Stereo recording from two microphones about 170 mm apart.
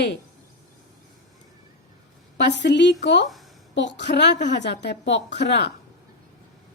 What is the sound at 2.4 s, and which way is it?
A woman's voice, 90° left.